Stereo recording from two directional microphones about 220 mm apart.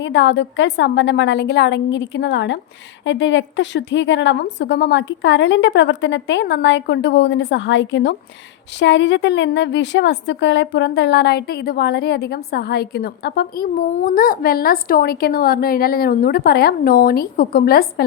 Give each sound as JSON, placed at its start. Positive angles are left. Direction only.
{"t": 0.0, "sound": "a woman's voice", "side_deg": 55}